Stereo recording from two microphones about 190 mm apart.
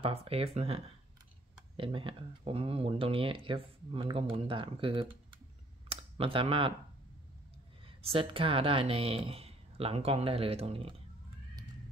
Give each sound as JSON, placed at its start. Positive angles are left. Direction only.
{"t": 0.0, "sound": "speech", "side_deg": -30}
{"t": 5.9, "sound": "a sound", "side_deg": -30}
{"t": 7.8, "sound": "speech", "side_deg": -30}